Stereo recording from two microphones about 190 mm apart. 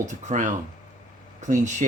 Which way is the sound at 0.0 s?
40° right (ahead or behind).